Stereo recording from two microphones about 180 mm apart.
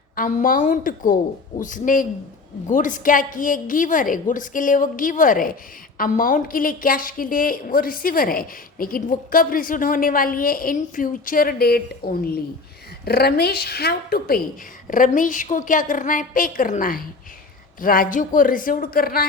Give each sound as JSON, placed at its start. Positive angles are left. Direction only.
{"t": 0.2, "sound": "a woman's voice", "side_deg": 45}